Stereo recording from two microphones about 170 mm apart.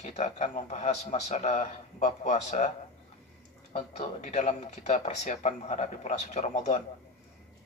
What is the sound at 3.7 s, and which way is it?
Speech, 40° left (ahead or behind).